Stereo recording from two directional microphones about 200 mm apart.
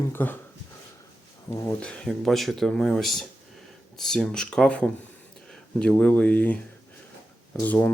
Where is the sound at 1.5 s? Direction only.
10° left (ahead or behind).